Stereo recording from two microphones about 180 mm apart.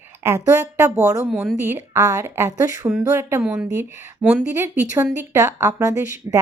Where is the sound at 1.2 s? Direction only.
5° right (ahead or behind).